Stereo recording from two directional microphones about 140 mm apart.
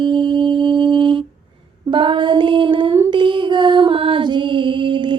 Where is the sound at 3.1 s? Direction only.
35° right (ahead or behind).